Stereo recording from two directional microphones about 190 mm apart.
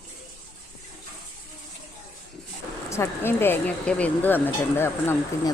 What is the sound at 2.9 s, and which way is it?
Speech, 15° left (ahead or behind).